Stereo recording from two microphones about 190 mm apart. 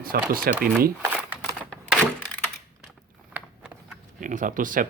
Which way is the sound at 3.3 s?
5° right (ahead or behind).